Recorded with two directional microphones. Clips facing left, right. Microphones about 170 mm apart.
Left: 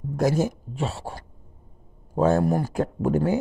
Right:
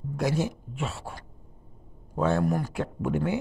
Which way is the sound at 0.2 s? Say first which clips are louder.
Left 5 dB; 45° left (ahead or behind).